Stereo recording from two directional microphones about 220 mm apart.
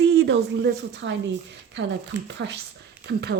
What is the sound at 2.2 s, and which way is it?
Speech, 55° right (ahead or behind).